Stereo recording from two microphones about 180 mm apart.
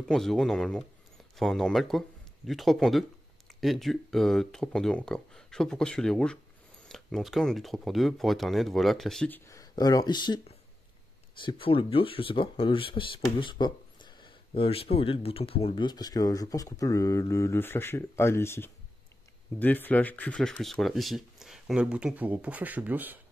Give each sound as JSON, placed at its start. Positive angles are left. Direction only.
{"t": 0.1, "sound": "speech", "side_deg": 0}
{"t": 9.5, "sound": "speech", "side_deg": 20}
{"t": 11.4, "sound": "speech", "side_deg": 30}